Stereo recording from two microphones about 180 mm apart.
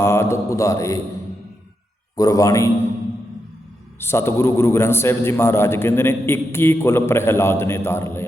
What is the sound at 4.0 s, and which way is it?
A man's voice, 15° left (ahead or behind).